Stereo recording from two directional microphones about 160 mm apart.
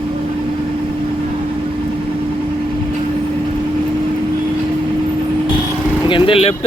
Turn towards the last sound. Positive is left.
turn(degrees=35)  # may be behind; listen again after turning